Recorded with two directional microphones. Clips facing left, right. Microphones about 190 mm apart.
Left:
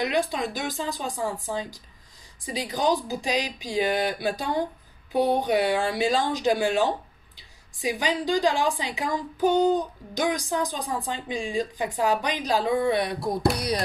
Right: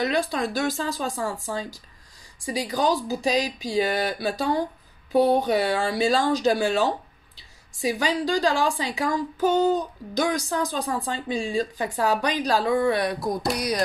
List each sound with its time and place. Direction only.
0.0 s a woman's voice: 15° left (ahead or behind)